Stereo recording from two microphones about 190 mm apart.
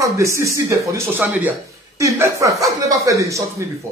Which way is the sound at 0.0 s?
15° right (ahead or behind).